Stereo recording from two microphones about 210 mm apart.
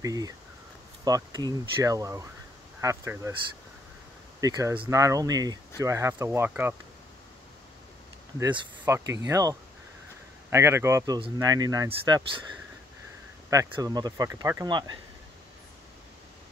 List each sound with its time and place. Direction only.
0.0 s speech: 15° right (ahead or behind)
4.4 s speech: 15° right (ahead or behind)
8.4 s speech: 15° right (ahead or behind)
13.5 s speech: 15° right (ahead or behind)